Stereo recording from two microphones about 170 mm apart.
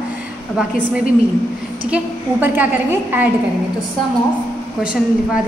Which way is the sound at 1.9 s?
10° right (ahead or behind).